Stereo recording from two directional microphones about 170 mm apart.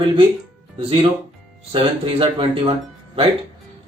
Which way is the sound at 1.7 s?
30° right (ahead or behind).